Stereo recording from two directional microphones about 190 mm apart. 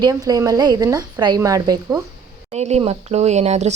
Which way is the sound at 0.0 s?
20° right (ahead or behind).